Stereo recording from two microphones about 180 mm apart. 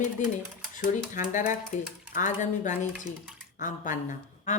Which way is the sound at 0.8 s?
45° left (ahead or behind).